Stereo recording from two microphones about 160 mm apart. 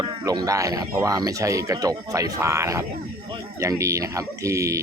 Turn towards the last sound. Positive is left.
turn(degrees=-20)  # may be behind; listen again after turning